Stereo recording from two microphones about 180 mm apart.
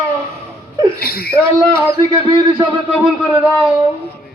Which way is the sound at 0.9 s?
60° left (ahead or behind).